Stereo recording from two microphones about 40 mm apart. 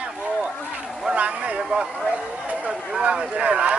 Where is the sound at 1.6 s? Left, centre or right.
Right.